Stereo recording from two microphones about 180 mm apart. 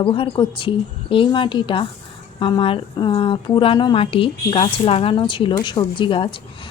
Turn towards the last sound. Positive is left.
turn(degrees=30)  # may be behind; listen again after turning